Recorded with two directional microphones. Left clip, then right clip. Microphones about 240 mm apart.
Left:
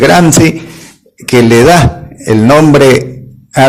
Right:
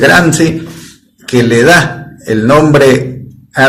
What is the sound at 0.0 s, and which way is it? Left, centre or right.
Speech, left.